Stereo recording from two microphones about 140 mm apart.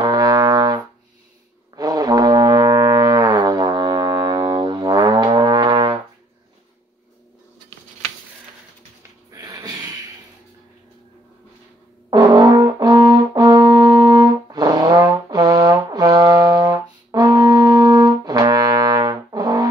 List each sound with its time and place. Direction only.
0.0 s brass instrument: 30° right (ahead or behind)
9.3 s a sound: 25° right (ahead or behind)
12.1 s brass instrument: 30° right (ahead or behind)